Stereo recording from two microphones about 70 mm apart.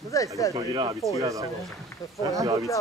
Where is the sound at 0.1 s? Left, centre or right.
Left.